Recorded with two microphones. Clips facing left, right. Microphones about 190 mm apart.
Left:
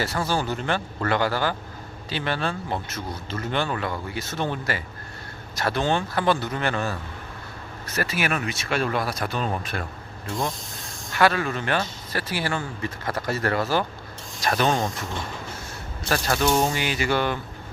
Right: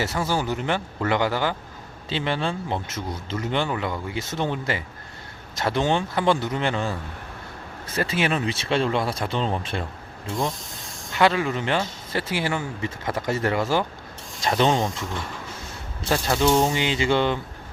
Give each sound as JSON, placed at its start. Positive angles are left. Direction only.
{"t": 0.3, "sound": "a man's voice", "side_deg": -15}
{"t": 7.9, "sound": "a man's voice", "side_deg": -25}
{"t": 11.1, "sound": "a man's voice", "side_deg": -20}
{"t": 16.0, "sound": "a man's voice", "side_deg": -20}